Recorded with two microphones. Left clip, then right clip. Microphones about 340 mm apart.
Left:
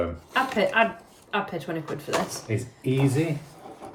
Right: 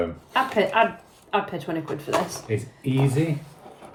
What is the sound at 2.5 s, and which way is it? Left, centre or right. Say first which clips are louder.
Speech: right 1 dB; centre.